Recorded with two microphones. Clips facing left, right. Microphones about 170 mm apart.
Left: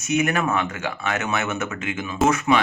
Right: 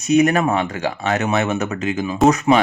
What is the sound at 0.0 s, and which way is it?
Speech, 35° right (ahead or behind).